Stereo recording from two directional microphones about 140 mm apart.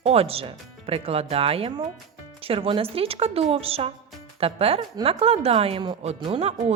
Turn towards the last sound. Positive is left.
turn(degrees=-45)  # may be behind; listen again after turning